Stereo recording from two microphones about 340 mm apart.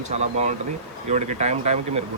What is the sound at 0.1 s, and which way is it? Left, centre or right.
Speech, centre.